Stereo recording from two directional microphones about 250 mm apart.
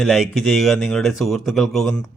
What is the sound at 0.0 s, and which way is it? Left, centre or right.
Speech, centre.